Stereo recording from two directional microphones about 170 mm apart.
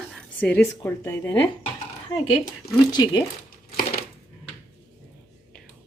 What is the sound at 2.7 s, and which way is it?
Speech, 25° left (ahead or behind).